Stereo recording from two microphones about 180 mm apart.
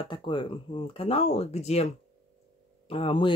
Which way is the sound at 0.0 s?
25° left (ahead or behind).